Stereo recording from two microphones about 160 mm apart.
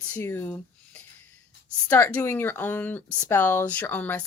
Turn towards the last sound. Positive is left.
turn(degrees=10)  # may be behind; listen again after turning